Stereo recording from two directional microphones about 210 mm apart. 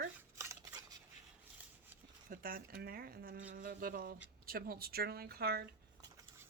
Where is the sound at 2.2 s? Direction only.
45° right (ahead or behind).